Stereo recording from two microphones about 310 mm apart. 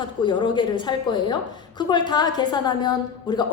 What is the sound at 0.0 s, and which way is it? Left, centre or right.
A woman's voice, centre.